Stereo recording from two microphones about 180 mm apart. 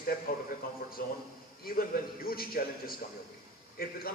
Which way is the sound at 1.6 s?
55° left (ahead or behind).